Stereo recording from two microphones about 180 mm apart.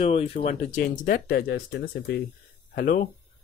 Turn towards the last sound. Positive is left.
turn(degrees=50)  # may be behind; listen again after turning